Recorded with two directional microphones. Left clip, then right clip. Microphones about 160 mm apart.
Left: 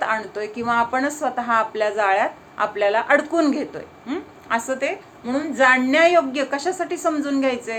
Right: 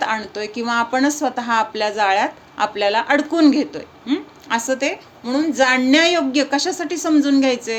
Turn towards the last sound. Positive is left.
turn(degrees=-50)  # may be behind; listen again after turning